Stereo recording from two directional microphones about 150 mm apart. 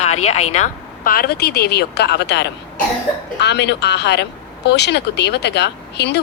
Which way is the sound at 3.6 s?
90° left.